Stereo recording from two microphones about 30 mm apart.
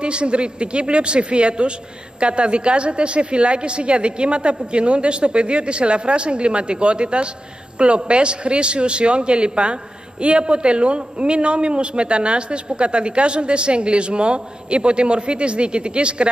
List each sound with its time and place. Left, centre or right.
0.0 s a man's voice: right